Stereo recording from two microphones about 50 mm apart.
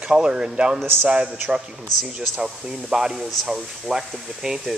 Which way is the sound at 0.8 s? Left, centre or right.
Right.